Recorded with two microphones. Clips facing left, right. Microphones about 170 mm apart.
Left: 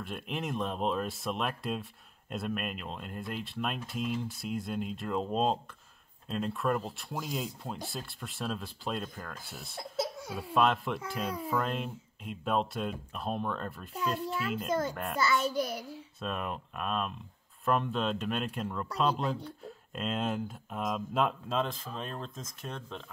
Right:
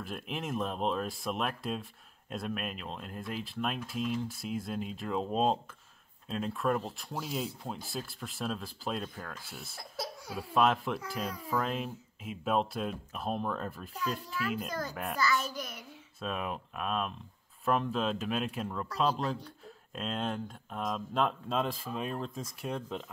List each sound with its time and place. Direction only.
0.0 s speech: centre (ahead or behind)
9.9 s laughter: 25° left (ahead or behind)
10.3 s speech: centre (ahead or behind)
14.7 s a child's voice: 25° left (ahead or behind)
16.2 s speech: centre (ahead or behind)